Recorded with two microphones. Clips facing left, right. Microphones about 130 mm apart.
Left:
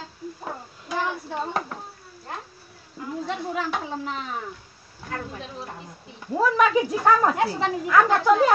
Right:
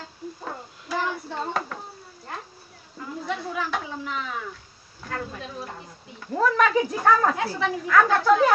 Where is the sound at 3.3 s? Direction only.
30° left (ahead or behind).